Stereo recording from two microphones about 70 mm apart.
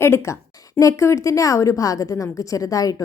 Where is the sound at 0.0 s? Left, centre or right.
Left.